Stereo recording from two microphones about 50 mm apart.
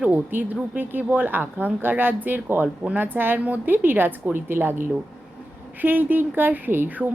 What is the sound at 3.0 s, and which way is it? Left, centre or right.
A woman's voice, right.